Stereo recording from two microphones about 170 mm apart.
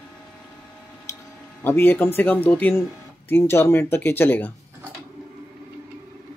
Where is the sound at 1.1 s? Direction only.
20° left (ahead or behind).